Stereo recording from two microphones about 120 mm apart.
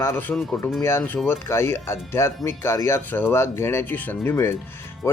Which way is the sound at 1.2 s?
20° left (ahead or behind).